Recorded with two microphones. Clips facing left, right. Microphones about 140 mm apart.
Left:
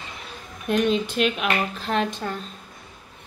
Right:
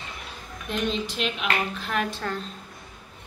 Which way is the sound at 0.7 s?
55° left (ahead or behind).